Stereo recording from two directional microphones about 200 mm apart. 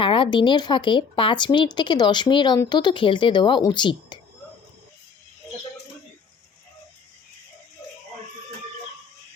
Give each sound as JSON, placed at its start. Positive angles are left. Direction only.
{"t": 0.0, "sound": "speech", "side_deg": 25}